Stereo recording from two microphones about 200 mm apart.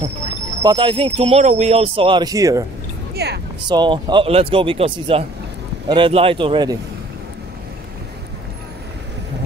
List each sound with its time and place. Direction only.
0.6 s speech: 20° right (ahead or behind)
3.2 s speech: 55° right (ahead or behind)
3.6 s speech: 20° right (ahead or behind)